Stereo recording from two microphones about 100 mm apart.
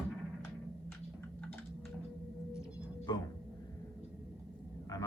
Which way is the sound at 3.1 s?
45° left (ahead or behind).